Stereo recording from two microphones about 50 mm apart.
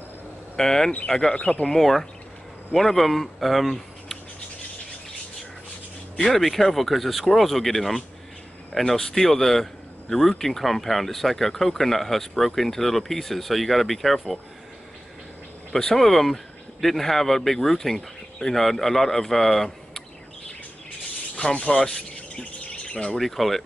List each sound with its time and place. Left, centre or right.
0.6 s speech: centre
1.3 s speech: left
1.7 s speech: centre
6.2 s speech: centre
15.7 s speech: centre
21.5 s speech: left
21.8 s chirp: centre
23.1 s speech: centre